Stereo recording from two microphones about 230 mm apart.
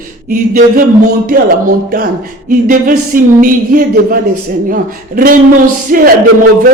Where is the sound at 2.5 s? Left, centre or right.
Right.